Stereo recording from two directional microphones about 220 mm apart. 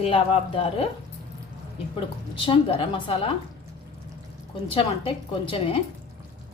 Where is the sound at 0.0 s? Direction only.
25° left (ahead or behind).